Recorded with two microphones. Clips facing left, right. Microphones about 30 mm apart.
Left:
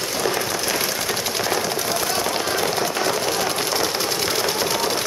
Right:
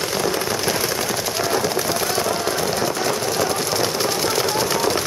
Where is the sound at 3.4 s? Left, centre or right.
Centre.